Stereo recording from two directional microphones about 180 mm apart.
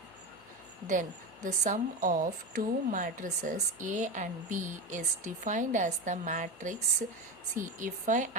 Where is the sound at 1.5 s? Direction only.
45° right (ahead or behind).